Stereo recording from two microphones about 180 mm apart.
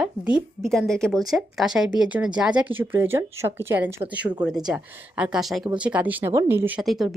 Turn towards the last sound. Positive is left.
turn(degrees=0)  # may be behind; listen again after turning